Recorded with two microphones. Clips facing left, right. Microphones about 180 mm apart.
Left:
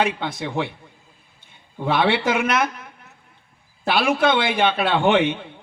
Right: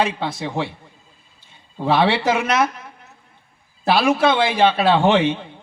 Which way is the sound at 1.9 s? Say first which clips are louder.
Right 2 dB; 55° left (ahead or behind).